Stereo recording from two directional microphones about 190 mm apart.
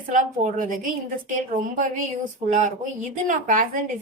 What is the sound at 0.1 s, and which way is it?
Speech, 45° right (ahead or behind).